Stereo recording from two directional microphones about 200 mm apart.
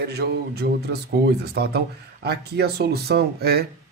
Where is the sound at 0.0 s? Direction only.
55° right (ahead or behind).